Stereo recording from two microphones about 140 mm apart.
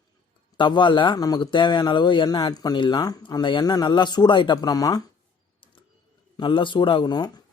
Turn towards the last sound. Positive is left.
turn(degrees=30)  # may be behind; listen again after turning